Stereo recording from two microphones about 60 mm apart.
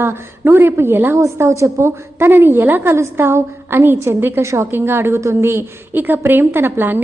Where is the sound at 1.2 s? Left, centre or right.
Right.